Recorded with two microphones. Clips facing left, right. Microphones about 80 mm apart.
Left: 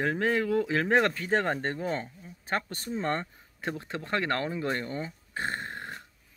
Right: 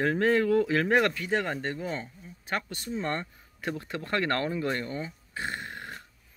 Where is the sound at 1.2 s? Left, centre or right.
Left.